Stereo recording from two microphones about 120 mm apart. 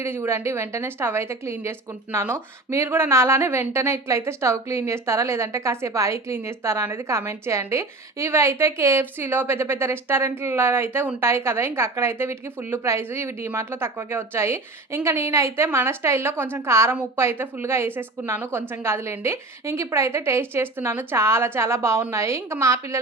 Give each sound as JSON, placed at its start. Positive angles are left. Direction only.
{"t": 0.0, "sound": "a woman's voice", "side_deg": -20}